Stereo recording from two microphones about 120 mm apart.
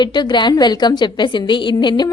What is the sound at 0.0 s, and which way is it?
A woman's voice, 40° left (ahead or behind).